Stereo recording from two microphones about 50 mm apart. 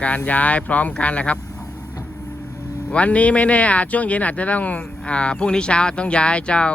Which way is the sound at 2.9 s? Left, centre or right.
Left.